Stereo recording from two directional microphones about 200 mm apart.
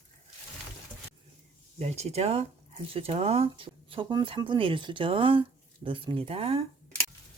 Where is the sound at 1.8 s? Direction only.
35° right (ahead or behind).